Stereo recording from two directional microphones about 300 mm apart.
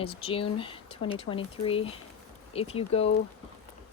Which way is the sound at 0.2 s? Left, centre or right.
Centre.